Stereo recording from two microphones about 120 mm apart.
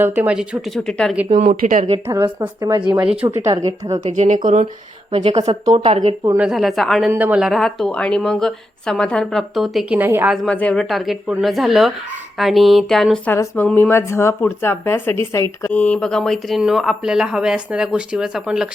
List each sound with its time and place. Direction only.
0.0 s speech: 15° right (ahead or behind); by 1.1 s 5° left (ahead or behind)
1.6 s speech: 90° right
2.0 s speech: 20° right (ahead or behind)
3.0 s speech: 10° right (ahead or behind)
3.2 s speech: 25° right (ahead or behind)
4.1 s speech: 80° right
5.1 s a woman's voice: 60° right (ahead or behind)
6.3 s speech: 5° right (ahead or behind)
7.1 s speech: 15° right (ahead or behind)
10.0 s speech: 20° right (ahead or behind)
10.2 s speech: 5° left (ahead or behind)
13.2 s a woman's voice: 20° left (ahead or behind)
15.7 s speech: 10° left (ahead or behind); by 18.7 s 5° right (ahead or behind)